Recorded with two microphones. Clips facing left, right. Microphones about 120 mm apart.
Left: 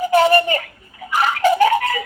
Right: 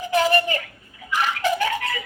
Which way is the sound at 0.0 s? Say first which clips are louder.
Left 6 dB; 40° left (ahead or behind).